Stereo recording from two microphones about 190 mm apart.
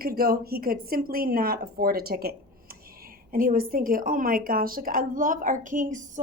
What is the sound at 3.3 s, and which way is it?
A woman's voice, 50° right (ahead or behind).